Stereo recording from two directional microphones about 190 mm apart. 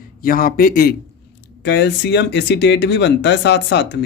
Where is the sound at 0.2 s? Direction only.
50° left (ahead or behind).